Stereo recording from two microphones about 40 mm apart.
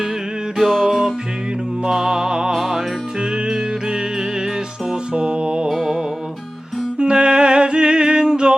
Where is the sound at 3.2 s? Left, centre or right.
Centre.